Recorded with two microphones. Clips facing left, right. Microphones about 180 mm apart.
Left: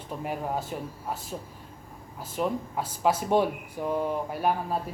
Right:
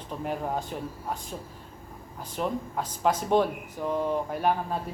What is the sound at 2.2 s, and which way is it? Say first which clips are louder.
Speech: left 1 dB; 5° left (ahead or behind).